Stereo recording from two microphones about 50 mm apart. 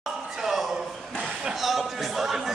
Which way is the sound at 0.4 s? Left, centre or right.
Centre.